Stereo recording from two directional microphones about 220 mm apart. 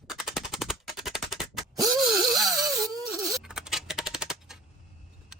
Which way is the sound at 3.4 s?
Centre (ahead or behind).